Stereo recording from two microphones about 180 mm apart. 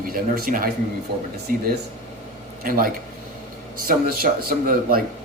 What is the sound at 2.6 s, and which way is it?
A man's voice, 50° right (ahead or behind).